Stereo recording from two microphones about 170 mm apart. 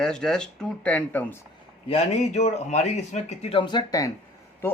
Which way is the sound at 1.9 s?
40° left (ahead or behind).